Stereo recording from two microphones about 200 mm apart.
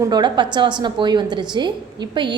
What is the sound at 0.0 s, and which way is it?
A woman's voice, 20° right (ahead or behind).